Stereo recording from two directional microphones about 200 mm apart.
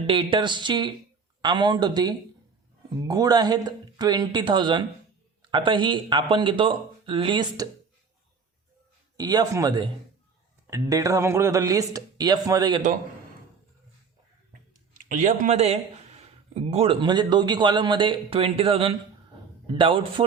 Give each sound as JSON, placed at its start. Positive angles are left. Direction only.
{"t": 0.1, "sound": "speech", "side_deg": -25}
{"t": 9.1, "sound": "speech", "side_deg": -20}
{"t": 14.9, "sound": "speech", "side_deg": -40}